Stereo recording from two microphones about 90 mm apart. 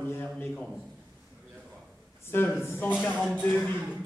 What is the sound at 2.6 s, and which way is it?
Speech, 25° left (ahead or behind).